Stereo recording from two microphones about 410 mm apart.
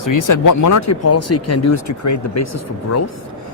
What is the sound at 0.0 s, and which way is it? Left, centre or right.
Speech, left.